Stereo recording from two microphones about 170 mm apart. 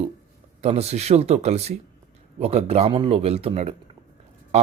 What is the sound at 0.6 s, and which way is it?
Speech, 40° right (ahead or behind).